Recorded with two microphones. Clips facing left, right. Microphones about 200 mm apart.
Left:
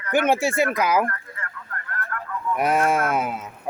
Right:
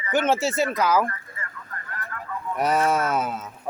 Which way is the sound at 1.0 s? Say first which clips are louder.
Left 2 dB; 60° left (ahead or behind).